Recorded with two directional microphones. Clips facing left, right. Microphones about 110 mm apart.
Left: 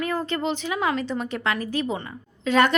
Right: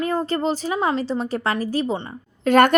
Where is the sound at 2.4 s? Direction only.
50° right (ahead or behind).